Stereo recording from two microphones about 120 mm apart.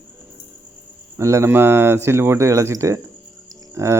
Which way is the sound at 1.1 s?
25° right (ahead or behind).